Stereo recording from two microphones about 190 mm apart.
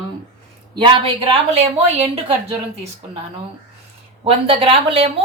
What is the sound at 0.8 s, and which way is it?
A woman's voice, 25° right (ahead or behind).